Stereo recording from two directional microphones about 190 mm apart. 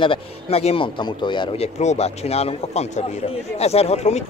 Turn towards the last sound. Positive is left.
turn(degrees=35)  # may be behind; listen again after turning